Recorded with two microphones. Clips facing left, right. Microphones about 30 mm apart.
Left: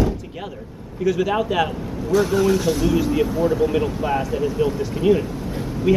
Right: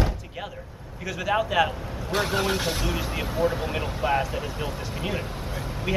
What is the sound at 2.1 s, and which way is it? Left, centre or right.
Speech, right.